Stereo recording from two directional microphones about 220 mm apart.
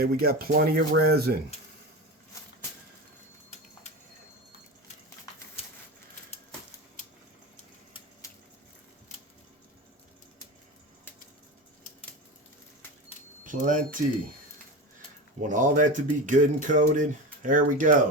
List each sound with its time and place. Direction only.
0.0 s speech: 45° right (ahead or behind)
13.4 s speech: 35° right (ahead or behind)
15.4 s speech: 35° right (ahead or behind)